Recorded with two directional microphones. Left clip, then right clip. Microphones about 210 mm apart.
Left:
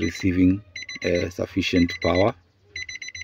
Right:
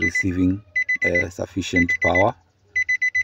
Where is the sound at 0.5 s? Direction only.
Centre (ahead or behind).